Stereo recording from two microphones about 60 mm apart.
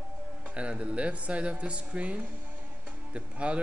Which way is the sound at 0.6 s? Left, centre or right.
Right.